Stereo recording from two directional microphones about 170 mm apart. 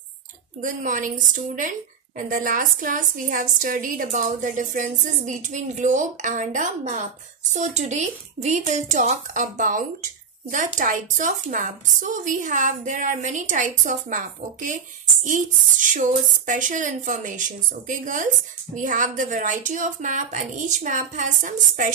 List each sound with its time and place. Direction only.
0.6 s a woman's voice: 50° right (ahead or behind)